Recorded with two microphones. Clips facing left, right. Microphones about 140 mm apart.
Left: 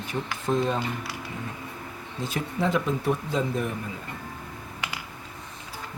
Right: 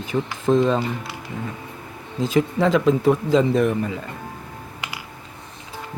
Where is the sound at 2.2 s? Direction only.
90° right.